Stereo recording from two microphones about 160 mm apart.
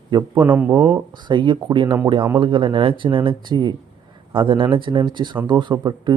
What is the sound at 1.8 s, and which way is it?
Speech, 15° right (ahead or behind).